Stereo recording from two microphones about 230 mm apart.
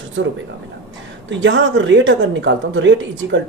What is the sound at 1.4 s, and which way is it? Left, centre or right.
Speech, right.